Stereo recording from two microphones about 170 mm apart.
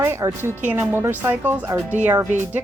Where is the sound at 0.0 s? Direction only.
15° right (ahead or behind).